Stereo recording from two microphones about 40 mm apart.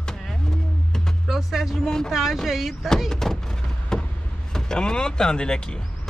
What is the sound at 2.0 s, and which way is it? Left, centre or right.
Speech, centre.